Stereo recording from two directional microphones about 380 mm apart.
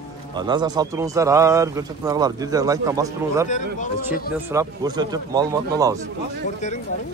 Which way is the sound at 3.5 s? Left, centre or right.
Centre.